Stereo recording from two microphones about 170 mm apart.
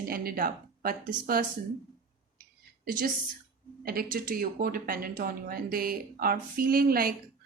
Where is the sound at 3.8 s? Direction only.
60° right (ahead or behind).